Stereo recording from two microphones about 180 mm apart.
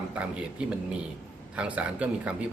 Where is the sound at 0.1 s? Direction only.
5° right (ahead or behind).